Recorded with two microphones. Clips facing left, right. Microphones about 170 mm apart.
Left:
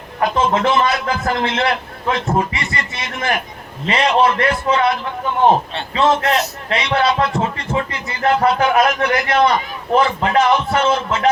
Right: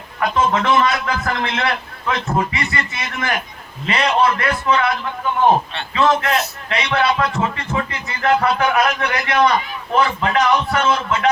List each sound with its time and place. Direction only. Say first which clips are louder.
0.2 s speech: left 1 dB; 35° left (ahead or behind)
6.3 s speech: left 2 dB; 40° left (ahead or behind)